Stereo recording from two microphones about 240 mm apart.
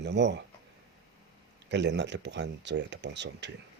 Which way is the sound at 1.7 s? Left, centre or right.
Right.